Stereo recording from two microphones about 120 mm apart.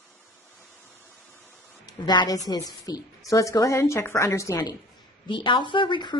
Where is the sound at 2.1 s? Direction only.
35° left (ahead or behind).